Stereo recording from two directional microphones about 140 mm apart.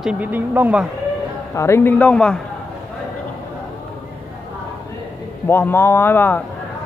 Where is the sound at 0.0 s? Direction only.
10° right (ahead or behind).